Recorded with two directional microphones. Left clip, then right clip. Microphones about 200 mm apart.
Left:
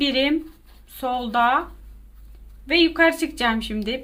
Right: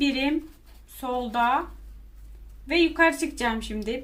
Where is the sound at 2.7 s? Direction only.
35° left (ahead or behind).